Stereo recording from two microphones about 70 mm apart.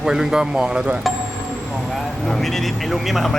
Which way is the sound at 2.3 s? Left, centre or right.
Centre.